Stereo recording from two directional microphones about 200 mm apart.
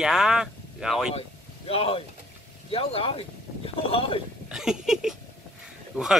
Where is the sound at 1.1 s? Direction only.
30° left (ahead or behind).